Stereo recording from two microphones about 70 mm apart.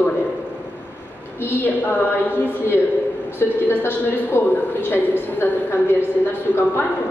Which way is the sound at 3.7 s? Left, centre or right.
Left.